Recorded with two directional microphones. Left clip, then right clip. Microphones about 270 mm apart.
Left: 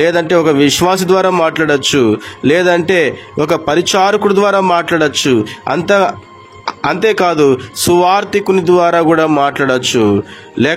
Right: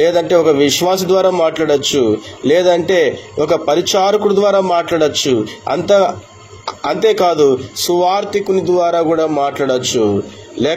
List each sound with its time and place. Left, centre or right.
0.0 s a man's voice: left